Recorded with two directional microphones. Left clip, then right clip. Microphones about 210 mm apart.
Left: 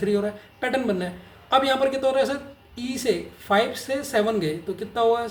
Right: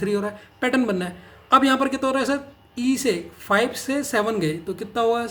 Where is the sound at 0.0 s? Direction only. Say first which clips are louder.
Left 1 dB; 40° right (ahead or behind).